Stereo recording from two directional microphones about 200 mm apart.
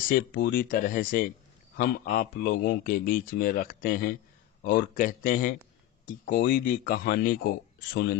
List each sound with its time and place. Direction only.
0.0 s speech: 45° left (ahead or behind)